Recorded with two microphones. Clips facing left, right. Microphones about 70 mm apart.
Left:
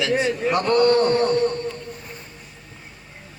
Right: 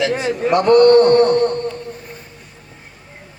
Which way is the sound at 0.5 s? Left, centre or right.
Right.